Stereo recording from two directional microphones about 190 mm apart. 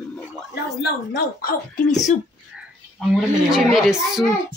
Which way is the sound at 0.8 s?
50° left (ahead or behind).